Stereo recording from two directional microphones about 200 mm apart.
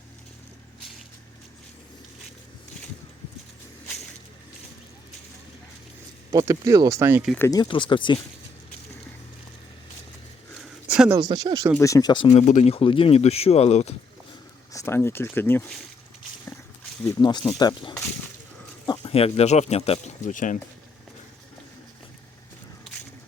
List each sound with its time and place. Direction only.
6.3 s speech: 20° right (ahead or behind)
7.3 s speech: 15° left (ahead or behind)
10.6 s a sound: 5° right (ahead or behind)
11.2 s speech: 20° right (ahead or behind)
11.8 s speech: 15° left (ahead or behind); by 13.9 s 30° left (ahead or behind)
14.7 s speech: 15° left (ahead or behind)
17.0 s speech: 20° left (ahead or behind); by 20.6 s 40° left (ahead or behind)